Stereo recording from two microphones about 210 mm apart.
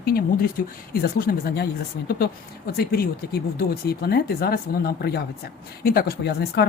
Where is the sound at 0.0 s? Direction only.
45° left (ahead or behind).